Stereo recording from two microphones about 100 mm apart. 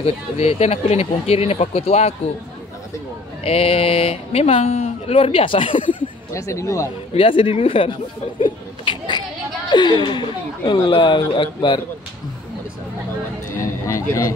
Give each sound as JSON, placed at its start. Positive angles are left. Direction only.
{"t": 0.0, "sound": "speech", "side_deg": 85}
{"t": 3.4, "sound": "speech", "side_deg": 75}
{"t": 6.3, "sound": "speech", "side_deg": 30}
{"t": 7.2, "sound": "speech", "side_deg": 65}
{"t": 8.4, "sound": "a sound", "side_deg": 50}
{"t": 9.7, "sound": "speech", "side_deg": 45}
{"t": 13.6, "sound": "a sound", "side_deg": 30}